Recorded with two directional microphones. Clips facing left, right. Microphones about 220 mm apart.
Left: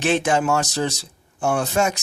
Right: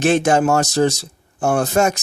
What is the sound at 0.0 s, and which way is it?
Speech, 45° right (ahead or behind).